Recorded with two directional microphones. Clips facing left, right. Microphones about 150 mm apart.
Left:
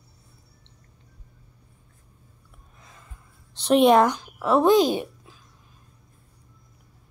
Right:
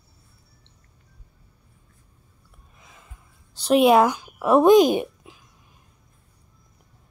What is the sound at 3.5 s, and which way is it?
Speech, 5° right (ahead or behind).